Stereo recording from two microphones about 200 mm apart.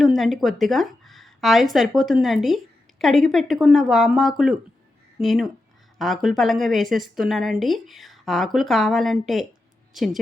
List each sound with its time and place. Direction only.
0.0 s a woman's voice: centre (ahead or behind)